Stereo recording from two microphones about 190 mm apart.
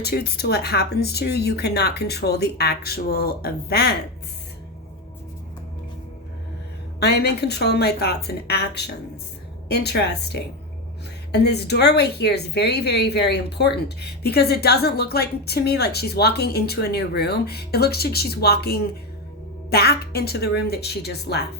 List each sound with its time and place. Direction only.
0.0 s a woman's voice: 55° left (ahead or behind)
7.0 s a woman's voice: 60° left (ahead or behind)